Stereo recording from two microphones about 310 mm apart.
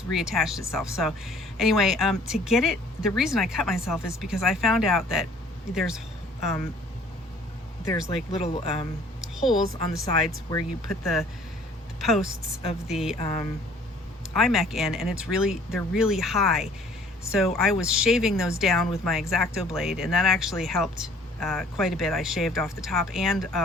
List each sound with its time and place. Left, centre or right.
0.1 s speech: centre
7.9 s speech: centre
9.2 s a sound: centre
10.8 s speech: centre
13.1 s speech: centre
14.3 s speech: centre